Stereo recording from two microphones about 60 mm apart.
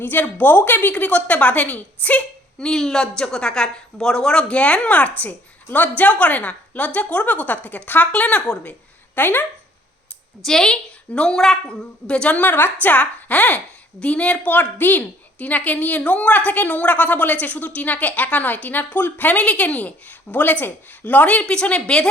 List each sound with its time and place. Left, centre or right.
0.0 s a woman's voice: left
10.4 s a woman's voice: centre
12.4 s a woman's voice: left; by 22.1 s centre